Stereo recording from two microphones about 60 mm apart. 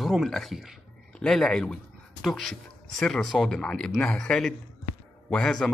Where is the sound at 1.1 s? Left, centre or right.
Centre.